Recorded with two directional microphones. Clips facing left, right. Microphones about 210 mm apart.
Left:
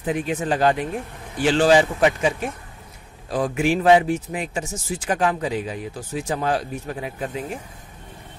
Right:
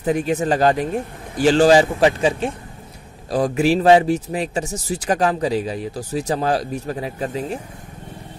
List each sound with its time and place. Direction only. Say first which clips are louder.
0.0 s a man's voice: right 5 dB; 40° right (ahead or behind)